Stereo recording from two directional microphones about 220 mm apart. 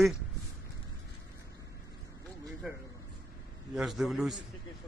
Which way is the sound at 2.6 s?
Centre (ahead or behind).